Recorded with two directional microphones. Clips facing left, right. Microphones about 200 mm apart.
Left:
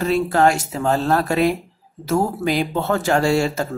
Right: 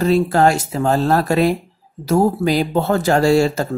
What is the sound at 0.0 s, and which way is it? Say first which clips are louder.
Speech: right 3 dB; 35° right (ahead or behind).